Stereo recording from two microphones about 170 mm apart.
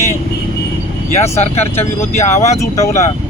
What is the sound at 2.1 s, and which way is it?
Speech, 45° left (ahead or behind).